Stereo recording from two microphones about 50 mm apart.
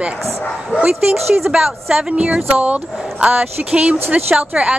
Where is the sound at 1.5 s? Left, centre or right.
Centre.